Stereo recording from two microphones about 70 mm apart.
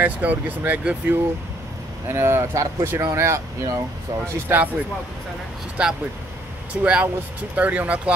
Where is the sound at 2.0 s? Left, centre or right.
Right.